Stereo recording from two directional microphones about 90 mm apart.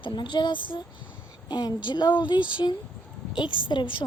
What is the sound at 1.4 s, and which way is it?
Speech, 55° left (ahead or behind).